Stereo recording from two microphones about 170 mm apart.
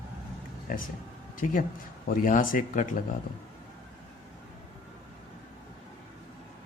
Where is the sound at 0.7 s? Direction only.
55° left (ahead or behind).